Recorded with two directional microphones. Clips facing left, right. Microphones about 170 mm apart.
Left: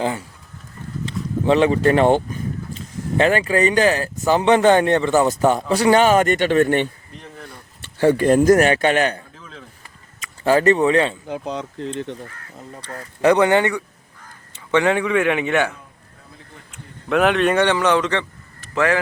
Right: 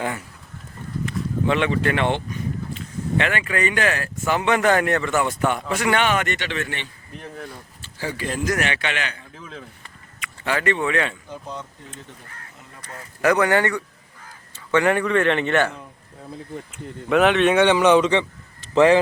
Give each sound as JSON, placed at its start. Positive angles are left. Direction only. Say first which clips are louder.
{"t": 0.0, "sound": "speech", "louder": "left 4 dB", "side_deg": 30}
{"t": 1.5, "sound": "speech", "louder": "left 7 dB", "side_deg": 35}
{"t": 7.2, "sound": "a sound", "louder": "right 3 dB", "side_deg": 0}
{"t": 8.0, "sound": "a man's voice", "louder": "left 12 dB", "side_deg": 50}
{"t": 9.4, "sound": "dishes", "louder": "right 3 dB", "side_deg": -10}
{"t": 10.4, "sound": "speech", "louder": "left 8 dB", "side_deg": 40}
{"t": 11.3, "sound": "speech", "louder": "left 7 dB", "side_deg": 85}
{"t": 12.8, "sound": "speech", "louder": "left 4 dB", "side_deg": 30}
{"t": 14.5, "sound": "caw", "louder": "left 1 dB", "side_deg": 20}
{"t": 15.0, "sound": "a man's voice", "louder": "left 1 dB", "side_deg": 5}
{"t": 16.7, "sound": "speech", "louder": "even", "side_deg": 0}
{"t": 17.7, "sound": "a man's voice", "louder": "right 2 dB", "side_deg": -15}